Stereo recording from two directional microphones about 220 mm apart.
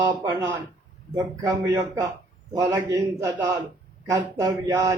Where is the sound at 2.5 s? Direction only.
15° right (ahead or behind).